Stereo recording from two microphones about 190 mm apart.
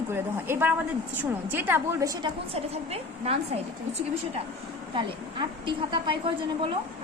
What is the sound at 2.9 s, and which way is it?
Speech, 30° right (ahead or behind).